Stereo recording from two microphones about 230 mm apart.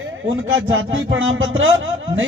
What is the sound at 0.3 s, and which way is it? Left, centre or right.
A man's voice, right.